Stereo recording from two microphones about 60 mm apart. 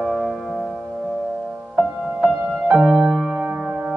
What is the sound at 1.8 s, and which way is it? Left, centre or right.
Music, right.